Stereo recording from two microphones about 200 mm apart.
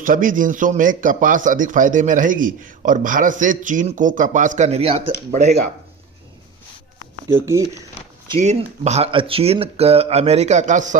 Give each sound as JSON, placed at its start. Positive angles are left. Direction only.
{"t": 0.0, "sound": "a man's voice", "side_deg": -40}
{"t": 7.3, "sound": "speech", "side_deg": -15}
{"t": 8.3, "sound": "a man's voice", "side_deg": -35}